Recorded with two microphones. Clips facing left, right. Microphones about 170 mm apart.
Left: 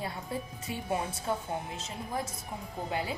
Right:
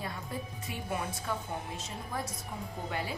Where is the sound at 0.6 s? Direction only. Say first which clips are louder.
Left 4 dB; 30° left (ahead or behind).